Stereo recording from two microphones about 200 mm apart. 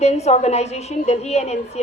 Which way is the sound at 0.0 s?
35° left (ahead or behind).